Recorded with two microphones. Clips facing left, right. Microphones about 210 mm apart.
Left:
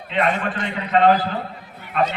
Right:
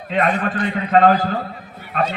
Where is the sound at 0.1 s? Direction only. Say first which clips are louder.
Right 2 dB; 45° right (ahead or behind).